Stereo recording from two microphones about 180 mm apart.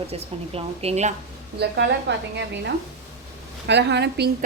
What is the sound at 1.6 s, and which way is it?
Speech, 70° right (ahead or behind).